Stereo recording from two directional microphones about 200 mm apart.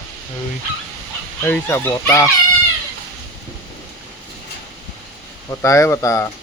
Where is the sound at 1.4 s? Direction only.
10° left (ahead or behind).